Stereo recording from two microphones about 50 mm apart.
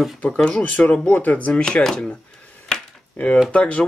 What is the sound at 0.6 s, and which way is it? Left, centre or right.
Speech, left.